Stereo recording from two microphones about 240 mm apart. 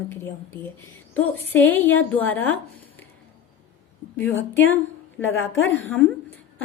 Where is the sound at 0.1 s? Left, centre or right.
Centre.